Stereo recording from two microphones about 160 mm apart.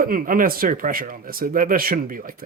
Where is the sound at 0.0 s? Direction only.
60° right (ahead or behind).